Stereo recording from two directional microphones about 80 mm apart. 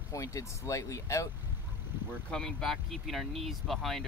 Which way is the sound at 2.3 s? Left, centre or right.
Centre.